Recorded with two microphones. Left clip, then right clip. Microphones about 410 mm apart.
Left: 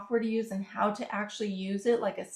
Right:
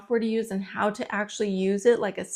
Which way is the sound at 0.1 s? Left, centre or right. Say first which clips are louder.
Right 5 dB; right.